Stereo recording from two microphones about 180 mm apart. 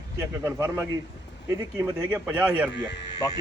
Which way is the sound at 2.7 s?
70° left (ahead or behind).